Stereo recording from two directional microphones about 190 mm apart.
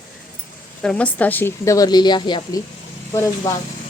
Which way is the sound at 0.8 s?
5° left (ahead or behind).